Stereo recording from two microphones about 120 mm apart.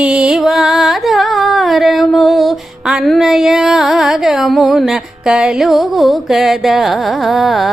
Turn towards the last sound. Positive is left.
turn(degrees=0)  # may be behind; listen again after turning